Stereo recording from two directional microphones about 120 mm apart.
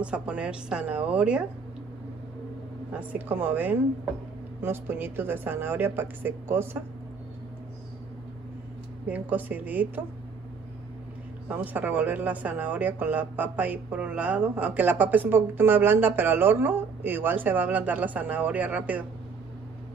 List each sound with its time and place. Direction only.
0.0 s speech: 10° right (ahead or behind)
2.9 s speech: 10° right (ahead or behind)
9.0 s speech: 15° right (ahead or behind)
11.4 s speech: 15° right (ahead or behind)